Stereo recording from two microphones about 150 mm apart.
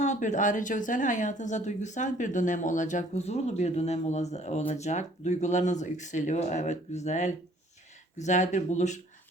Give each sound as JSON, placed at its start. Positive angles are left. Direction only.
{"t": 0.0, "sound": "speech", "side_deg": 50}